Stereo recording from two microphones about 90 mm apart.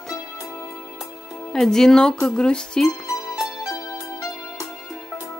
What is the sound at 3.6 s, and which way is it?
Music, 35° left (ahead or behind).